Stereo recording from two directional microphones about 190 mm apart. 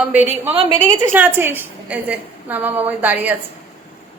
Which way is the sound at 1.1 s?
10° right (ahead or behind).